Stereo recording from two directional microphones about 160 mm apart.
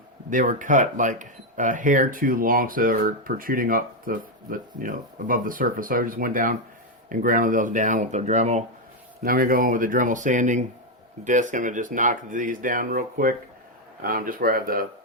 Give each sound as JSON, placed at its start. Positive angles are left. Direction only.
{"t": 0.3, "sound": "speech", "side_deg": -55}
{"t": 9.2, "sound": "speech", "side_deg": -60}